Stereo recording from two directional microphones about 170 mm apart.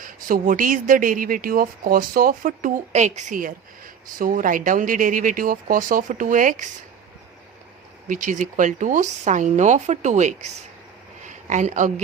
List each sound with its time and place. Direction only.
0.0 s speech: 50° right (ahead or behind)
8.0 s a woman's voice: 50° right (ahead or behind)